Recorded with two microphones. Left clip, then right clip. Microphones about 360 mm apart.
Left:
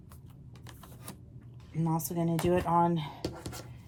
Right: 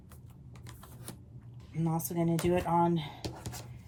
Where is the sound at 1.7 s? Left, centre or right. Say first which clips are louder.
Left 1 dB; centre.